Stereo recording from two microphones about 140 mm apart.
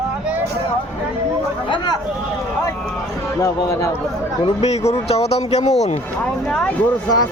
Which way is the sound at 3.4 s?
25° left (ahead or behind).